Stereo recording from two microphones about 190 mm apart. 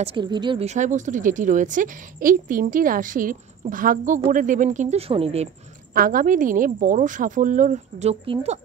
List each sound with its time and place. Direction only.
0.0 s speech: 25° right (ahead or behind)
5.9 s speech: 50° right (ahead or behind)